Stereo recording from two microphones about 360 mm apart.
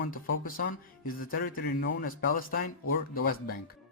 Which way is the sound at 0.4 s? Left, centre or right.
Left.